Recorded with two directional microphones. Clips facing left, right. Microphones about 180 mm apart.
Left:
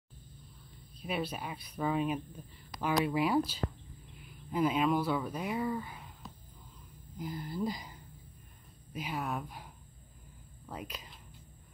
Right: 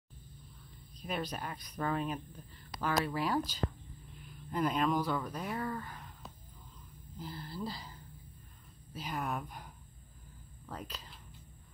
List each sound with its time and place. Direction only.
1.0 s speech: 5° left (ahead or behind)
8.9 s speech: 5° left (ahead or behind)
10.7 s speech: 10° left (ahead or behind)